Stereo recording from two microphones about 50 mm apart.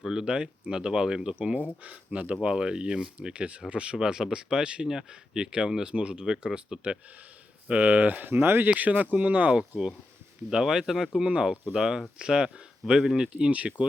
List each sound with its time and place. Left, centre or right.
0.0 s speech: centre
1.4 s speech: right
7.7 s speech: right
8.7 s speech: right
9.6 s speech: centre
10.5 s speech: centre
11.3 s speech: centre
11.7 s speech: centre